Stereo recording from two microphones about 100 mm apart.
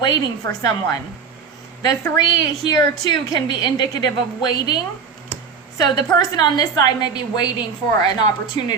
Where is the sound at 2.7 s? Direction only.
45° left (ahead or behind).